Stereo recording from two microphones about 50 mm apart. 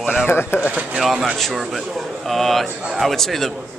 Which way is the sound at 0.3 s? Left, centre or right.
Left.